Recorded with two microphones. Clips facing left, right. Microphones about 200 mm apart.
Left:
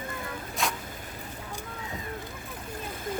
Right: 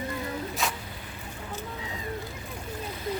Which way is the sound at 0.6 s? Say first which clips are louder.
Left 2 dB; centre (ahead or behind).